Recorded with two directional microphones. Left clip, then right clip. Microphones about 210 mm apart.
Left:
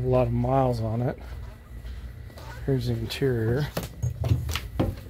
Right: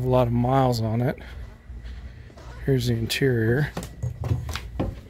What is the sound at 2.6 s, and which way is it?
Speech, 45° right (ahead or behind).